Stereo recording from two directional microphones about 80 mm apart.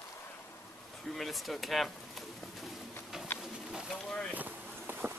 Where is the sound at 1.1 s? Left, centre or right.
Centre.